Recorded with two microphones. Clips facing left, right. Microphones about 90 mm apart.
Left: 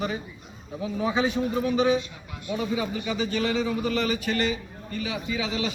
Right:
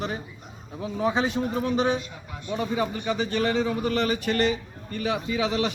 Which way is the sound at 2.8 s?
40° right (ahead or behind).